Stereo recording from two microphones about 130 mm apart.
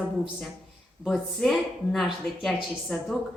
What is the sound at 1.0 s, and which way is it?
Speech, centre (ahead or behind).